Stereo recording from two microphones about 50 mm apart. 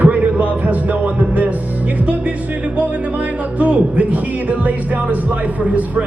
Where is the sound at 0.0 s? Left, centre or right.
Right.